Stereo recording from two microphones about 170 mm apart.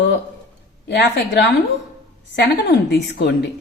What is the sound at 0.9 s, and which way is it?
Speech, 85° left.